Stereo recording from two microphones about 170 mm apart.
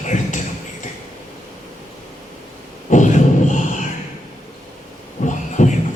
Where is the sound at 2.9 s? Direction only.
45° left (ahead or behind).